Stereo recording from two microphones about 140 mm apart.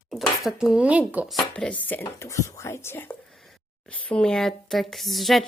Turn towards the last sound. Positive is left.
turn(degrees=0)  # may be behind; listen again after turning